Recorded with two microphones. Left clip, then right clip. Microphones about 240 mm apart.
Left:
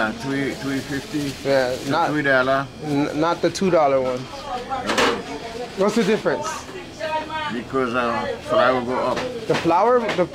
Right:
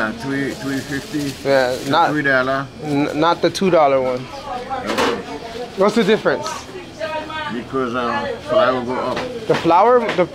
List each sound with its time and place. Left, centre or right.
0.0 s speech: centre
4.8 s a sound: centre
5.9 s speech: centre
7.7 s speech: centre
8.7 s speech: right
9.0 s speech: centre
9.7 s speech: centre